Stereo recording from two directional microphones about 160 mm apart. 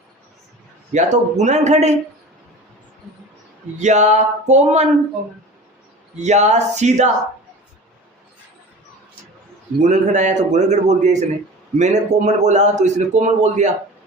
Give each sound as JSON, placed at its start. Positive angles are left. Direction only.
{"t": 0.9, "sound": "a man's voice", "side_deg": -45}
{"t": 3.8, "sound": "a man's voice", "side_deg": -45}
{"t": 6.1, "sound": "a man's voice", "side_deg": -45}
{"t": 9.8, "sound": "a man's voice", "side_deg": -50}